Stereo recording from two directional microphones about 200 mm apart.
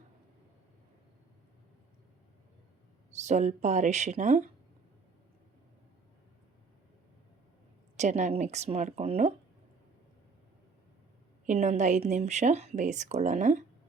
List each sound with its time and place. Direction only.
3.2 s speech: 35° right (ahead or behind)
7.9 s speech: 35° right (ahead or behind)
11.4 s speech: 35° right (ahead or behind)